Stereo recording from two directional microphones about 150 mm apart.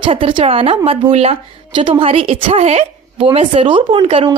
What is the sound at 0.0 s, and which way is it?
Speech, 35° right (ahead or behind).